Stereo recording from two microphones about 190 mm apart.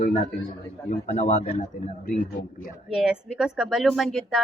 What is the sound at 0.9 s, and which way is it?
Speech, 40° left (ahead or behind).